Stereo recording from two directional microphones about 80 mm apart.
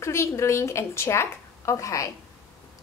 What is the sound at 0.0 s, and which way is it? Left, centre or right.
A woman's voice, left.